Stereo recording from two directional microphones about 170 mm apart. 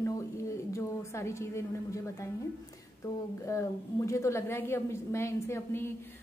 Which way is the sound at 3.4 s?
15° left (ahead or behind).